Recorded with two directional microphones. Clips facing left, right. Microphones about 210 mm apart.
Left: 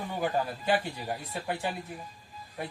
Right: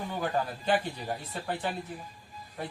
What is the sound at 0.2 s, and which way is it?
Speech, 10° left (ahead or behind).